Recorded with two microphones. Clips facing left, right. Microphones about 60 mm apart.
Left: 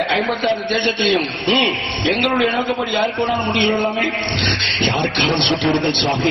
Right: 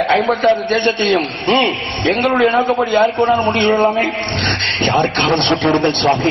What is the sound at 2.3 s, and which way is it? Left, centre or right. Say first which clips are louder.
Speech: right 5 dB; right.